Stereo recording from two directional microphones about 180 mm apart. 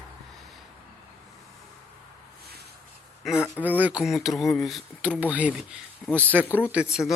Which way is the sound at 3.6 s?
10° right (ahead or behind).